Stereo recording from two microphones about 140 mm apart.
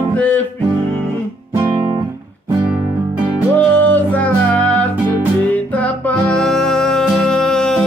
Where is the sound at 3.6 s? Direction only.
10° left (ahead or behind).